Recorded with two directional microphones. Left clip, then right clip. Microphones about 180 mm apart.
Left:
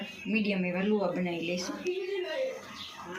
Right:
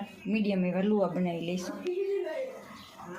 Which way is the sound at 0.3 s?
60° right (ahead or behind).